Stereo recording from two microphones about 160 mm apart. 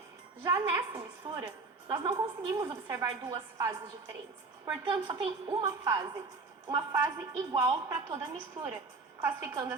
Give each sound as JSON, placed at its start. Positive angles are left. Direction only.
{"t": 0.4, "sound": "a woman's voice", "side_deg": -25}
{"t": 8.6, "sound": "a woman's voice", "side_deg": -40}
{"t": 9.2, "sound": "a woman's voice", "side_deg": -20}